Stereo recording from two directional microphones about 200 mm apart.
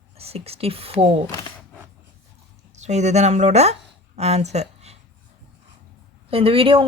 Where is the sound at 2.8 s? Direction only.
35° right (ahead or behind).